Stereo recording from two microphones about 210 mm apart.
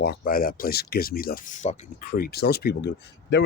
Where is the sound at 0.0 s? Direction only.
45° left (ahead or behind).